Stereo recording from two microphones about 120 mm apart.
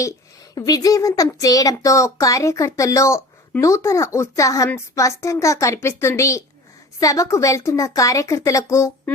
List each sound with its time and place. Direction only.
0.5 s a child's voice: 30° left (ahead or behind)